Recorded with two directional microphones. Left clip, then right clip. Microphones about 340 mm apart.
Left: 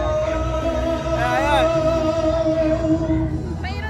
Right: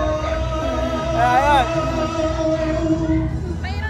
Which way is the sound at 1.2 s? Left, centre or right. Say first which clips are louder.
Right 3 dB; centre.